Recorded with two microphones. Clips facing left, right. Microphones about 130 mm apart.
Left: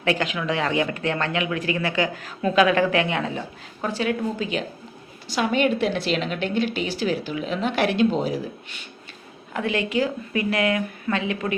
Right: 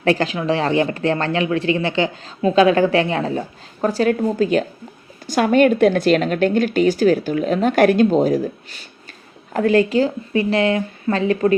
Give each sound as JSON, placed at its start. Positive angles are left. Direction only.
{"t": 0.0, "sound": "a woman's voice", "side_deg": -35}